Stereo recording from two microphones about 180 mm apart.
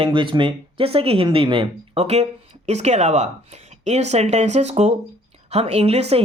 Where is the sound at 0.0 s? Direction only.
25° right (ahead or behind).